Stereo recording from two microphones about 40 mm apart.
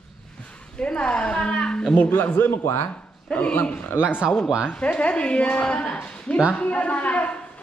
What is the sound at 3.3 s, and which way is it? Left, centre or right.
Speech, left.